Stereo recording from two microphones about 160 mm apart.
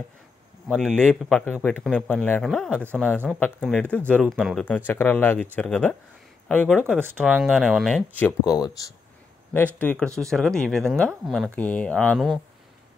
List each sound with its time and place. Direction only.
0.7 s a man's voice: 5° left (ahead or behind)
6.8 s speech: 10° right (ahead or behind)
7.2 s a man's voice: centre (ahead or behind)
8.2 s speech: 15° left (ahead or behind)
9.8 s a man's voice: 5° left (ahead or behind)